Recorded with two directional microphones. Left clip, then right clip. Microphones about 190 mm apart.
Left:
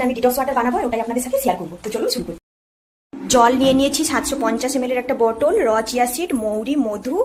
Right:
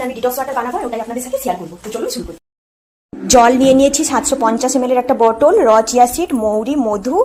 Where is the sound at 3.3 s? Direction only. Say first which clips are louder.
Right 5 dB; 25° right (ahead or behind).